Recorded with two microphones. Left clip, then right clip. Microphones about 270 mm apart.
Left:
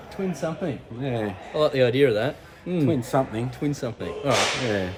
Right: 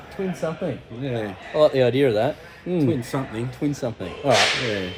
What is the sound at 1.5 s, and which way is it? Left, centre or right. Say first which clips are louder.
Speech: right 3 dB; centre.